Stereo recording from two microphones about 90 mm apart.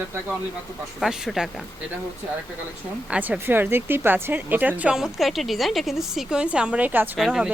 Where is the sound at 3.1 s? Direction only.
15° right (ahead or behind).